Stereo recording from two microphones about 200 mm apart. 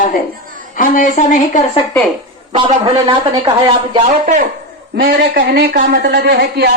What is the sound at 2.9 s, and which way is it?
Speech, 20° right (ahead or behind).